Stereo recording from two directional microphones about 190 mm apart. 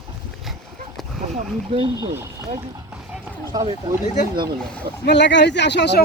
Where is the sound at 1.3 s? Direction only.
30° right (ahead or behind).